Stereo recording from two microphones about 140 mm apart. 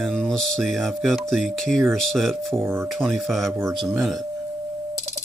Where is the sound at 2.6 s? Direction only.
15° right (ahead or behind).